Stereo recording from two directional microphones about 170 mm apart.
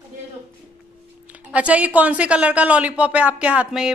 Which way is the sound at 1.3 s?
10° right (ahead or behind).